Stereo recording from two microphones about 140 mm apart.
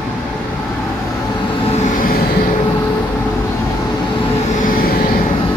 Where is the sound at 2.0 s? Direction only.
90° left.